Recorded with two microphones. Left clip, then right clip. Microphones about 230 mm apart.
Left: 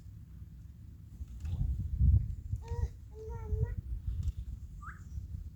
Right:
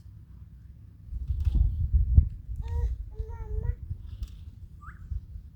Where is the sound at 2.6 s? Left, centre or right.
Right.